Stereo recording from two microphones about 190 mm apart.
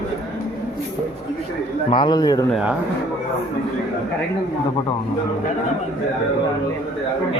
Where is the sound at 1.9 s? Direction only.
25° left (ahead or behind).